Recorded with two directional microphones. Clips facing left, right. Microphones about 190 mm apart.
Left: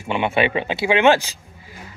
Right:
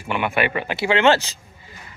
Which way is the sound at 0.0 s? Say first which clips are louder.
Left 2 dB; 25° left (ahead or behind).